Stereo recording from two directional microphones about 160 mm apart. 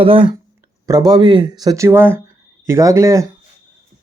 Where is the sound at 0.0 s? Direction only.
35° right (ahead or behind).